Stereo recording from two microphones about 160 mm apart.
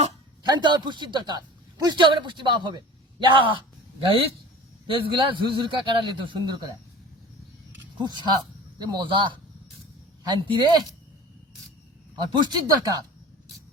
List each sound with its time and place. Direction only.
0.4 s a man's voice: 25° right (ahead or behind)
4.9 s a man's voice: 30° right (ahead or behind)
7.9 s a man's voice: 25° right (ahead or behind)
10.2 s a man's voice: 30° right (ahead or behind)
12.2 s a man's voice: 30° right (ahead or behind)